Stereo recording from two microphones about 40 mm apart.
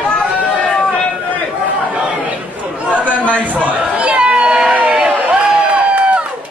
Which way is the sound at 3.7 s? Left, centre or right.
Right.